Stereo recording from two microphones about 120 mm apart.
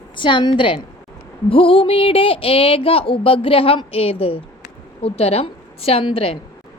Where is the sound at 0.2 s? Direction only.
40° left (ahead or behind).